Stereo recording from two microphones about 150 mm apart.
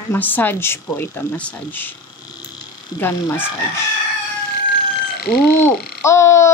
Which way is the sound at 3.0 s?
15° left (ahead or behind).